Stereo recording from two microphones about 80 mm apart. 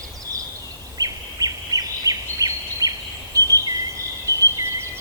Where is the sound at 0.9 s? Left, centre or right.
Right.